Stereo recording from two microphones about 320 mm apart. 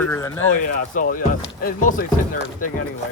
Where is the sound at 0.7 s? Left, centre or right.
Left.